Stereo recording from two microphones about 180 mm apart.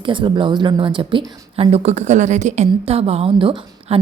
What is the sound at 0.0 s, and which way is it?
Speech, 25° right (ahead or behind).